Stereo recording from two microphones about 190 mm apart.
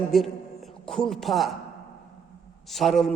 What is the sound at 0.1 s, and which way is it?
A man's voice, centre (ahead or behind).